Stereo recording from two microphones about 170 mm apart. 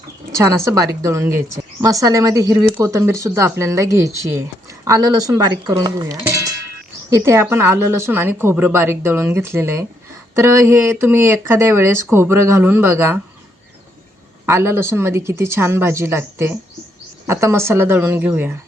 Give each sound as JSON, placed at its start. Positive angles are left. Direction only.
{"t": 0.3, "sound": "a woman's voice", "side_deg": -20}
{"t": 14.4, "sound": "a woman's voice", "side_deg": -15}